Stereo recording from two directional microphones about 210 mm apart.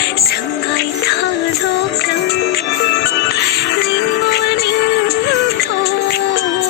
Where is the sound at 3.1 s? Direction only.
50° left (ahead or behind).